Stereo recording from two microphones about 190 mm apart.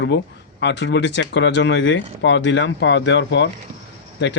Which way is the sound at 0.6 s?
65° left (ahead or behind).